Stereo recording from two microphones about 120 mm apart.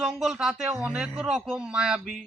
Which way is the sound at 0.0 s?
Centre (ahead or behind).